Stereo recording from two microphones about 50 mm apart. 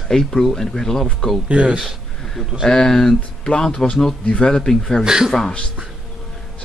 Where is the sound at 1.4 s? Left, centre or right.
Right.